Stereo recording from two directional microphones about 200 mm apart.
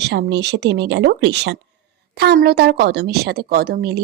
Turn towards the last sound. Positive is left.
turn(degrees=-55)  # may be behind; listen again after turning